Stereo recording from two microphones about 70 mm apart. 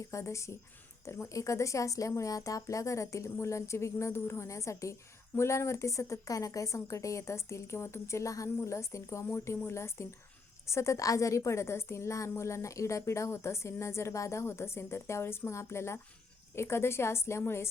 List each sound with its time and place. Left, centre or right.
0.1 s a woman's voice: left